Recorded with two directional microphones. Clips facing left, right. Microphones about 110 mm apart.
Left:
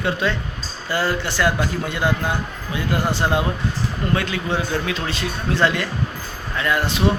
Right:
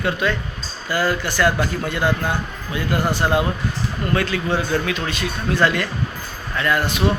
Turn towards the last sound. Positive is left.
turn(degrees=25)  # may be behind; listen again after turning